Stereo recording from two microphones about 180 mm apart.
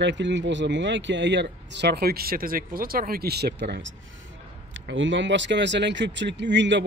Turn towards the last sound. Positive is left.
turn(degrees=-85)